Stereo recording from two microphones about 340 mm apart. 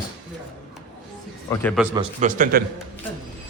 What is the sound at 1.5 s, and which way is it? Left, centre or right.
Speech, centre.